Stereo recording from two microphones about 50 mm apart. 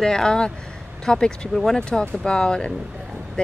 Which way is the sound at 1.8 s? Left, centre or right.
Centre.